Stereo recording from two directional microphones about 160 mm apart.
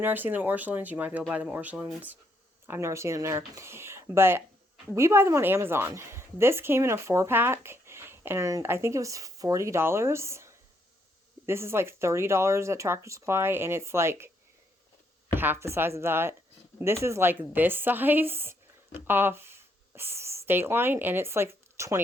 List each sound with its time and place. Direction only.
0.0 s a woman's voice: 10° right (ahead or behind)
15.4 s a woman's voice: 15° right (ahead or behind)